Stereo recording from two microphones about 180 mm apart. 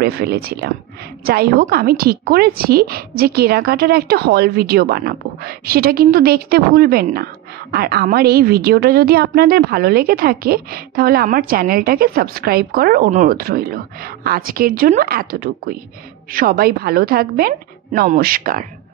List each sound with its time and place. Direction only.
0.0 s a woman's voice: 60° right (ahead or behind)